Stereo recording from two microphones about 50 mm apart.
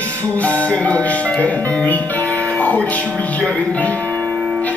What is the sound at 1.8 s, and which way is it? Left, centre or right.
Music, left.